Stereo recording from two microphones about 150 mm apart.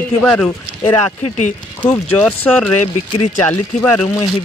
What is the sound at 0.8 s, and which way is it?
Speech, 50° left (ahead or behind).